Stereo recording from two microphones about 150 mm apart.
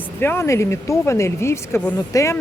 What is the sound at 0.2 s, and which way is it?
Speech, 15° left (ahead or behind).